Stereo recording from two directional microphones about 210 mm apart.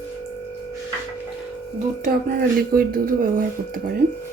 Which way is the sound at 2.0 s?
45° right (ahead or behind).